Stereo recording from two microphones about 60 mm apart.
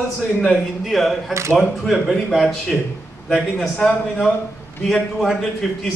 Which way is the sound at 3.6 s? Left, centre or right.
Centre.